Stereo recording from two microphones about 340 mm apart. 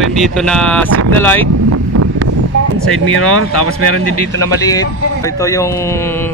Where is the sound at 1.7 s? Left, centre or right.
Right.